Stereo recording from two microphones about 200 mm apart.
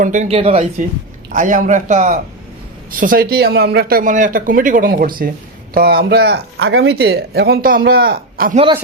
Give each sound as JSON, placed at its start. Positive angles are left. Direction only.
{"t": 0.0, "sound": "speech", "side_deg": -35}